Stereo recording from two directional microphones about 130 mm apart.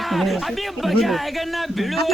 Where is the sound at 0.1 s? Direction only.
Centre (ahead or behind).